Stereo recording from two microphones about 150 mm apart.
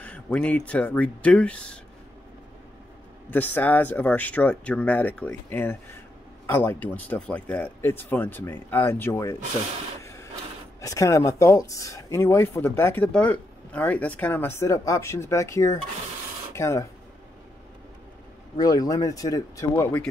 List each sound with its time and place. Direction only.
0.0 s speech: 10° left (ahead or behind)
3.3 s speech: 10° left (ahead or behind)
10.8 s speech: 20° left (ahead or behind)
18.6 s speech: 25° left (ahead or behind)
19.7 s speech: 10° left (ahead or behind)